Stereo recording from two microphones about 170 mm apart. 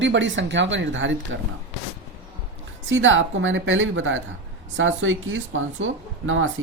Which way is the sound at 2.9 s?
90° right.